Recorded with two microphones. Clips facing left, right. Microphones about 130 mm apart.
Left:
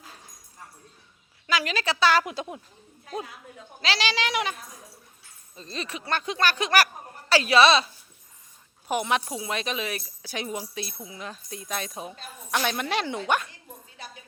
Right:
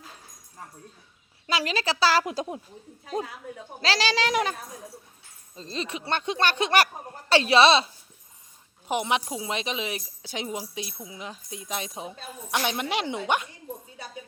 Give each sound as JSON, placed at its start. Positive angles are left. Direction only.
{"t": 1.5, "sound": "speech", "side_deg": -30}
{"t": 5.5, "sound": "speech", "side_deg": -30}
{"t": 8.9, "sound": "speech", "side_deg": -20}